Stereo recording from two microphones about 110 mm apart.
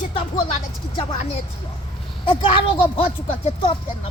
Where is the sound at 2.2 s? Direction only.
55° left (ahead or behind).